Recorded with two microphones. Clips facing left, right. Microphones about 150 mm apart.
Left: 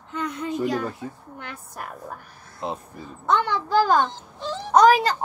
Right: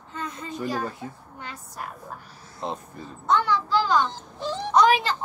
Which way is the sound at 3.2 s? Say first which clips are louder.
Even; 55° left (ahead or behind).